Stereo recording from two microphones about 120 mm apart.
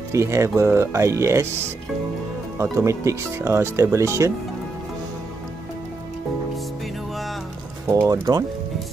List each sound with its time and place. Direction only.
0.1 s speech: 25° right (ahead or behind)
2.6 s speech: 25° right (ahead or behind)
8.1 s speech: 35° right (ahead or behind)